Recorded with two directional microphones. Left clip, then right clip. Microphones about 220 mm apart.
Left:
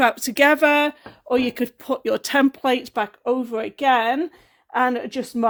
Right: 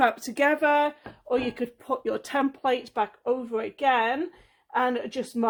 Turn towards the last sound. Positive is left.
turn(degrees=40)  # may be behind; listen again after turning